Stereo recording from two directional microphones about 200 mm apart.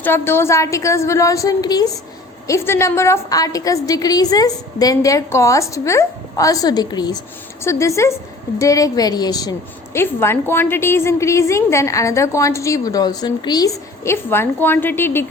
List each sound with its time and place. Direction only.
0.0 s a woman's voice: 10° left (ahead or behind)